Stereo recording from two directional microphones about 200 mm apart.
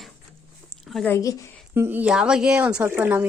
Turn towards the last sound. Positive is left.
turn(degrees=-10)  # may be behind; listen again after turning